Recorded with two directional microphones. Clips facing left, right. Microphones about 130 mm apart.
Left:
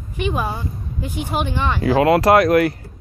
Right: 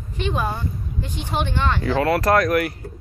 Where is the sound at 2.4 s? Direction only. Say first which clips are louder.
Left 5 dB; 30° left (ahead or behind).